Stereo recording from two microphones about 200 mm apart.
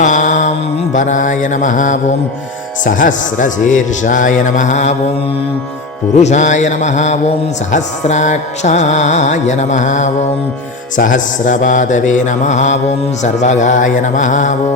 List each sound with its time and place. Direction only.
0.0 s music: 40° left (ahead or behind)
6.1 s music: 35° left (ahead or behind)